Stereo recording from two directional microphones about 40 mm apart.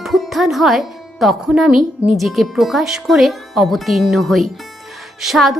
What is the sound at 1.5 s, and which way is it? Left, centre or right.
Speech, centre.